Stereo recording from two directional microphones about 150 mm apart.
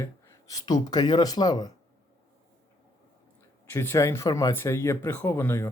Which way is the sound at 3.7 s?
20° left (ahead or behind).